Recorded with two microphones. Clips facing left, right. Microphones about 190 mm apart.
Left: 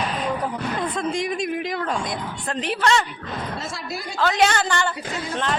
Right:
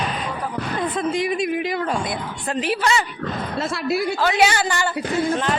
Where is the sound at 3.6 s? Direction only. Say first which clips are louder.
Right 9 dB; 65° right (ahead or behind).